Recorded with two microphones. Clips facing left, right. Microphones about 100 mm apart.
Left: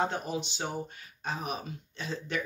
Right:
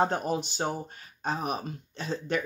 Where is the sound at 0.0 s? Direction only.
45° right (ahead or behind).